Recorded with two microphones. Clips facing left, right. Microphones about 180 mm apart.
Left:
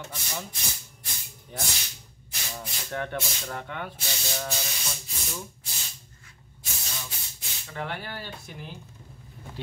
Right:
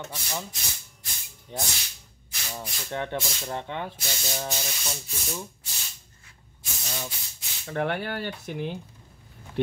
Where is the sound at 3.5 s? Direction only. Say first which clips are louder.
Right 4 dB; 25° right (ahead or behind).